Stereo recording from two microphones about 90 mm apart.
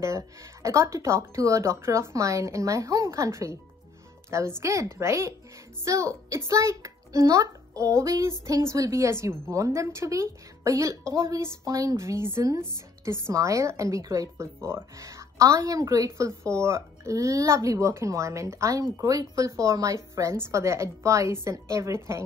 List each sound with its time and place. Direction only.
0.0 s a woman's voice: 35° right (ahead or behind)